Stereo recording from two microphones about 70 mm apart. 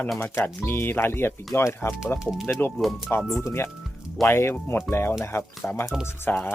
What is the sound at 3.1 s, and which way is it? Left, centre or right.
Speech, left.